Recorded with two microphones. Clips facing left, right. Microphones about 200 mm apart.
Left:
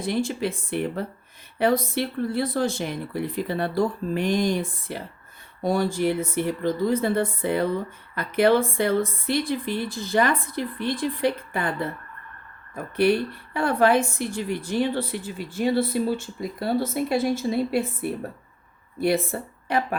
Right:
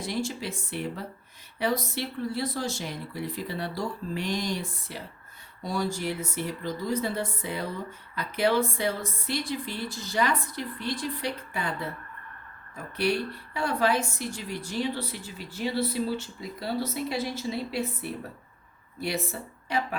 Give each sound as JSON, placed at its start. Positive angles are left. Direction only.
{"t": 0.0, "sound": "speech", "side_deg": 55}